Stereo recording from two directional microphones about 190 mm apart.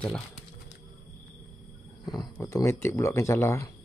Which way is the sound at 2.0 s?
20° left (ahead or behind).